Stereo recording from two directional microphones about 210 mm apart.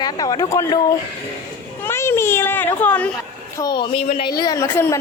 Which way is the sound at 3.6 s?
20° left (ahead or behind).